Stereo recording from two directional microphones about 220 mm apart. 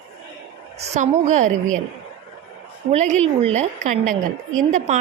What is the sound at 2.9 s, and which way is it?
A woman's voice, 30° right (ahead or behind).